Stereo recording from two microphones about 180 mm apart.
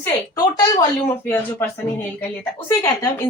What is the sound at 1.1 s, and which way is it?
A woman's voice, 10° left (ahead or behind).